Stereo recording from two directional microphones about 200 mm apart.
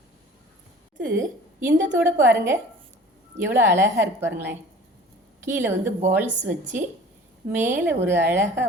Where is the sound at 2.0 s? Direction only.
10° right (ahead or behind).